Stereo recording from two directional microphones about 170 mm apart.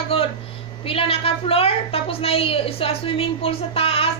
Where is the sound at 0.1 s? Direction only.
35° left (ahead or behind).